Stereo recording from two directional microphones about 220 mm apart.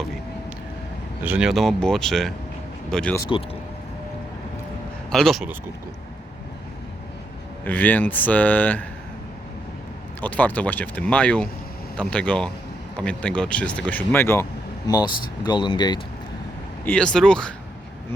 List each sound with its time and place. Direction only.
1.2 s speech: 5° right (ahead or behind)
5.1 s speech: centre (ahead or behind)
7.6 s speech: 10° left (ahead or behind)
10.2 s speech: 5° left (ahead or behind)
16.8 s speech: 5° left (ahead or behind)